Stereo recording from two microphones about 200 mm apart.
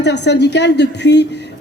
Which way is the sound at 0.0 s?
60° left (ahead or behind).